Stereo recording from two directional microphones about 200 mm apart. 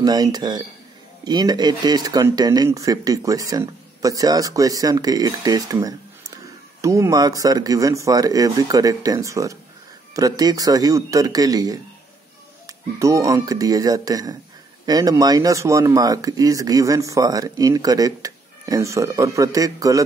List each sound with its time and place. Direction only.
0.0 s speech: 20° right (ahead or behind)